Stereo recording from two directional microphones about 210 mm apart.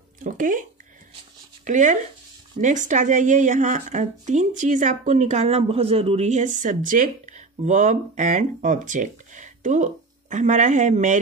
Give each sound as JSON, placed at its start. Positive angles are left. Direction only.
{"t": 0.2, "sound": "speech", "side_deg": -40}